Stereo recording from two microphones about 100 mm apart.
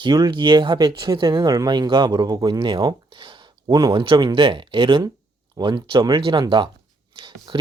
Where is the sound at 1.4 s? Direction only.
40° right (ahead or behind).